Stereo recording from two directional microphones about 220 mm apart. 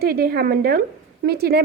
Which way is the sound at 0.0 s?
45° right (ahead or behind).